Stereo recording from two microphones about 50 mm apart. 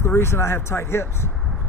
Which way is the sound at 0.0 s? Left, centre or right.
Left.